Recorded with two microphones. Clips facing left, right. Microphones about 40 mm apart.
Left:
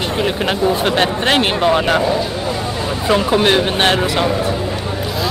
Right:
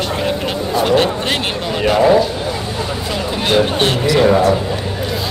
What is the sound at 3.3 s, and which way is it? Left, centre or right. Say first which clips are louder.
Speech: right 3 dB; left.